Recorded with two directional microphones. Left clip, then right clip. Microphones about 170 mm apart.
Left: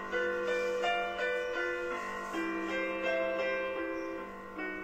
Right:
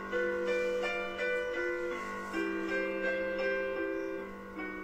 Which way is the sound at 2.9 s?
20° right (ahead or behind).